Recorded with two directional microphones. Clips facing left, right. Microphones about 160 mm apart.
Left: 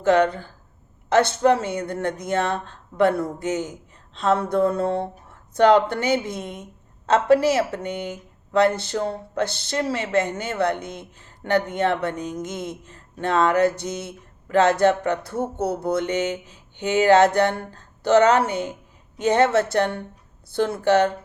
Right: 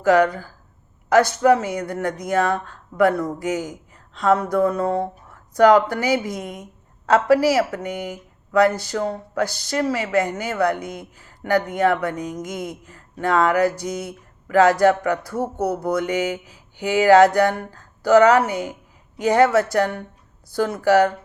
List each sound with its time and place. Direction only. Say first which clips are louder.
0.0 s speech: right 2 dB; 25° left (ahead or behind)